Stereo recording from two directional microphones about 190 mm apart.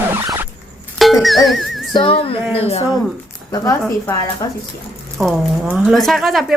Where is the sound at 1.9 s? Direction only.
30° left (ahead or behind).